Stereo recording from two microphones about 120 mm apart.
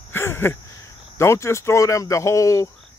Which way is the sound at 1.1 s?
20° left (ahead or behind).